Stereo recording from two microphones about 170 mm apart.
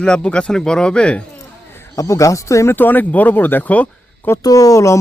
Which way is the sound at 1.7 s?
20° left (ahead or behind).